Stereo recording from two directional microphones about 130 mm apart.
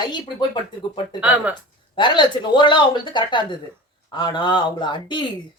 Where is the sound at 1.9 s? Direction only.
35° left (ahead or behind).